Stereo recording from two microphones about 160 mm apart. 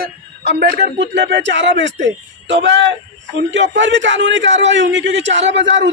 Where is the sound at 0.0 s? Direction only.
90° right.